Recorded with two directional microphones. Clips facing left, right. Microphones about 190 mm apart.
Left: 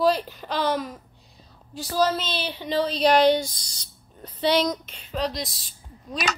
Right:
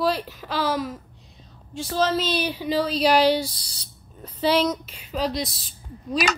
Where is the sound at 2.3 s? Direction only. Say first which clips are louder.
Right 4 dB; 10° right (ahead or behind).